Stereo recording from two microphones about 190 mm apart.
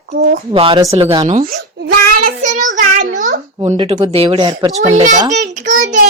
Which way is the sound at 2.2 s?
45° right (ahead or behind).